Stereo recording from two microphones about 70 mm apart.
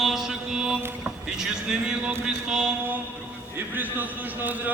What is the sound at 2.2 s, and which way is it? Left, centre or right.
Mantra, centre.